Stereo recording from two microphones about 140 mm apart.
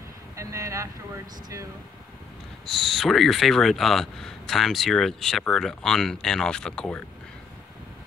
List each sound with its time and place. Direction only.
0.4 s speech: 20° right (ahead or behind)
2.6 s speech: centre (ahead or behind)